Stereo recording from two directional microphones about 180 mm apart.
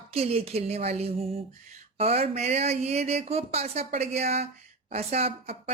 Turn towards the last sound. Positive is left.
turn(degrees=-35)  # may be behind; listen again after turning